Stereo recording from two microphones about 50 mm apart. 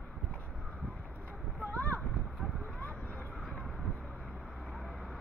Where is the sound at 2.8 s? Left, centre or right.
Left.